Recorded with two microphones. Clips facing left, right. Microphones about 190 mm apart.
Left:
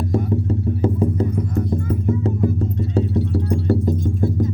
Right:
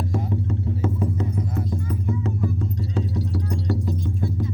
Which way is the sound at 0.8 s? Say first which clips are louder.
Left 7 dB; 30° left (ahead or behind).